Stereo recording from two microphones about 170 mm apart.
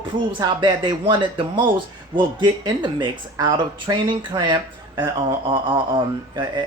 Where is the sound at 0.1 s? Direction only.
30° right (ahead or behind).